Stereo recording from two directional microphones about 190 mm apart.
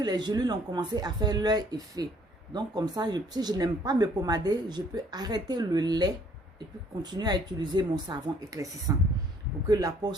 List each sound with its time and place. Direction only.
0.0 s speech: 20° right (ahead or behind)